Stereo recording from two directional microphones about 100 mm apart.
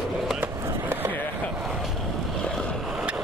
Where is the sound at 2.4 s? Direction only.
10° left (ahead or behind).